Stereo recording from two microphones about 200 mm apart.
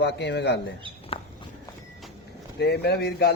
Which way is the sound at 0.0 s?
55° left (ahead or behind).